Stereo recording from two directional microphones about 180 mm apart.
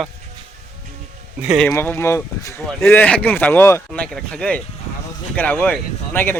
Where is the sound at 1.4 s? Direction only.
5° right (ahead or behind).